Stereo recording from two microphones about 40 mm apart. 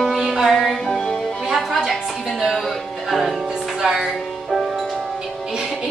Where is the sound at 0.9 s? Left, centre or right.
Centre.